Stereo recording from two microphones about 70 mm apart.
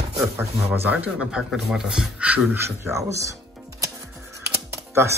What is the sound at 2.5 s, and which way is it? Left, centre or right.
Speech, right.